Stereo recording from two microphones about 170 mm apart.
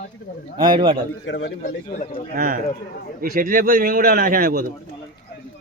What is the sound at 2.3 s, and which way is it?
Speech, 55° right (ahead or behind).